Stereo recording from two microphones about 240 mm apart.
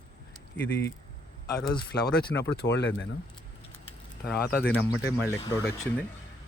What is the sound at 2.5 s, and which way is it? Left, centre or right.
Speech, left.